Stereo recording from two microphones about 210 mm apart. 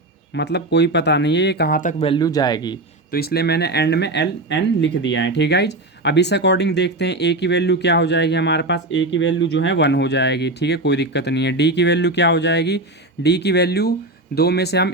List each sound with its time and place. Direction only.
0.3 s speech: 55° left (ahead or behind); by 2.7 s 20° left (ahead or behind)
3.1 s speech: 50° left (ahead or behind)